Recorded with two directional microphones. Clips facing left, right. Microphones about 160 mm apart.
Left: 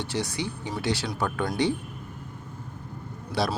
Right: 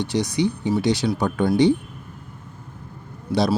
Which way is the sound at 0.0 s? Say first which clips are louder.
Right 8 dB; 15° right (ahead or behind).